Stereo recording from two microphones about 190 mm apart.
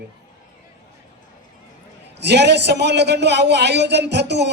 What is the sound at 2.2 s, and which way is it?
Speech, 65° right (ahead or behind).